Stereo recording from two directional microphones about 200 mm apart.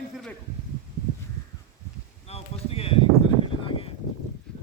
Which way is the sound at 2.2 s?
30° left (ahead or behind).